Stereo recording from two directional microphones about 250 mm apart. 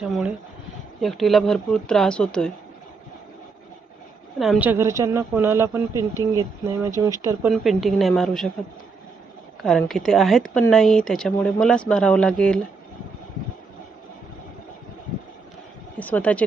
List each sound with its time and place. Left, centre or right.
0.0 s speech: centre
4.4 s speech: centre
7.5 s speech: centre
9.6 s speech: centre
16.0 s speech: centre